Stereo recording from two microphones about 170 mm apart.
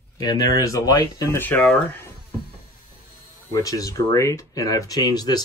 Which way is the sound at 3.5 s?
20° left (ahead or behind).